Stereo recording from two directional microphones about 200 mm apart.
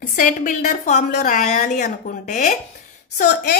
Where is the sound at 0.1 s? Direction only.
40° left (ahead or behind).